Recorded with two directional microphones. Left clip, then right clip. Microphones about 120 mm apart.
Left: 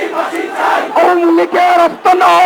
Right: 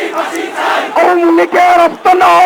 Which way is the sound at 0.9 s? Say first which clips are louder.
Right 2 dB; 20° left (ahead or behind).